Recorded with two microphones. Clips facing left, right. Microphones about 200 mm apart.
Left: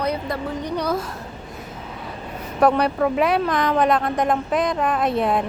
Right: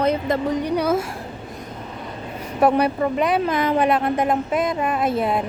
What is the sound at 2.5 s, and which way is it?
A woman's voice, 5° right (ahead or behind).